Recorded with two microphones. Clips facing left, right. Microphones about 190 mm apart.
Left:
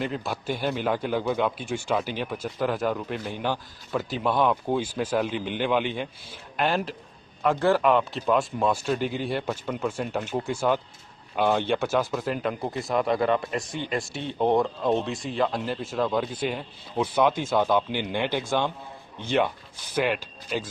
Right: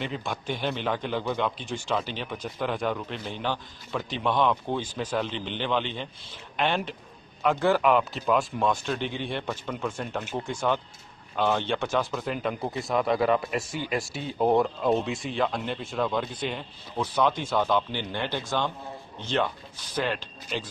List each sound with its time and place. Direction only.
0.0 s a man's voice: 5° left (ahead or behind)
16.9 s a man's voice: 15° left (ahead or behind)